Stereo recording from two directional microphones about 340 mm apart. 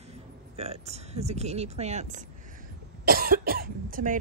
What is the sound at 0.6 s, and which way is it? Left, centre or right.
Speech, centre.